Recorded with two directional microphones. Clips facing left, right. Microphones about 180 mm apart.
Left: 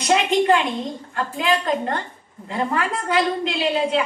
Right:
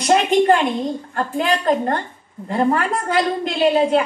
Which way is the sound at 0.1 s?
45° right (ahead or behind).